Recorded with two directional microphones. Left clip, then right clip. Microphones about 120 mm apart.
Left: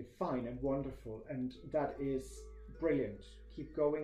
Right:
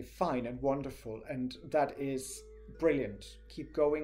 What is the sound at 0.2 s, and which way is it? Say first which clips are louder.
Speech: right 5 dB; 15° right (ahead or behind).